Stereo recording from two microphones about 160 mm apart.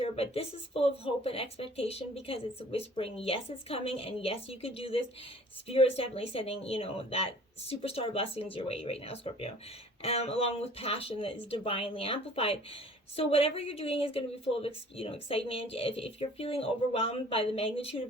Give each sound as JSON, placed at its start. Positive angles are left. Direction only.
{"t": 0.0, "sound": "a woman's voice", "side_deg": 40}